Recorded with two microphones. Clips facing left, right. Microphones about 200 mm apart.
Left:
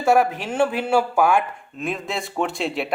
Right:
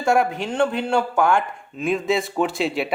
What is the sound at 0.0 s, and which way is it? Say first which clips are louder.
Speech: left 1 dB; centre (ahead or behind).